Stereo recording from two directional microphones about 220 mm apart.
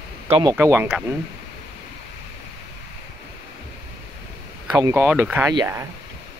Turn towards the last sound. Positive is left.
turn(degrees=-15)  # may be behind; listen again after turning